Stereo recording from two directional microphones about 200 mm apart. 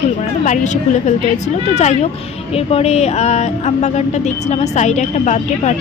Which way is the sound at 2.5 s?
30° left (ahead or behind).